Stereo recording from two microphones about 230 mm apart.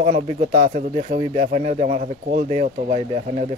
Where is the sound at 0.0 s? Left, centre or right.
Right.